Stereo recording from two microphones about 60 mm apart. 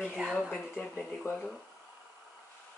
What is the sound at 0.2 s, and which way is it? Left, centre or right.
Speech, centre.